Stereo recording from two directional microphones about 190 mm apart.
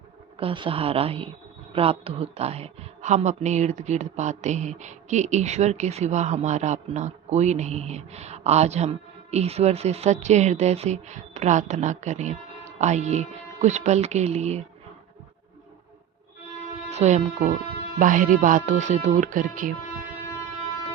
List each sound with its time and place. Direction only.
0.3 s a woman's voice: 25° right (ahead or behind)
16.9 s a woman's voice: 35° right (ahead or behind)